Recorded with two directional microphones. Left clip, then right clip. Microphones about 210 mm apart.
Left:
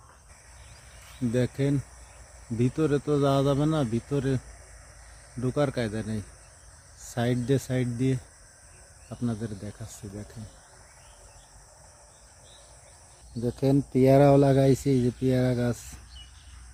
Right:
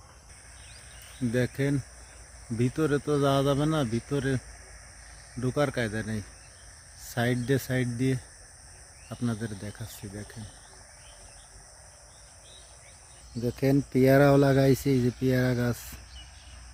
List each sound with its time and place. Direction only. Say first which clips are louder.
1.3 s speech: left 1 dB; 5° left (ahead or behind)
5.4 s speech: even; 5° left (ahead or behind)
13.4 s speech: left 1 dB; centre (ahead or behind)